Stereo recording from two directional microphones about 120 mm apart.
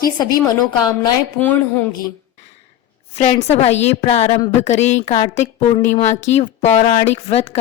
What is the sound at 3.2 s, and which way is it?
A woman's voice, 65° left (ahead or behind).